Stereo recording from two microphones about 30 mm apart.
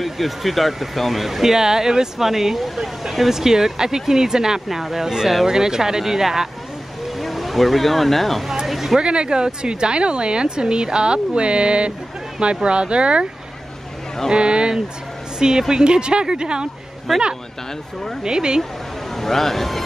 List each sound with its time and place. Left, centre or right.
0.0 s speech: centre
1.4 s speech: centre
7.2 s speech: centre
8.6 s a sound: centre
9.0 s speech: right
14.3 s speech: right
15.3 s a woman's voice: right
17.1 s speech: centre
18.2 s speech: right
19.1 s speech: centre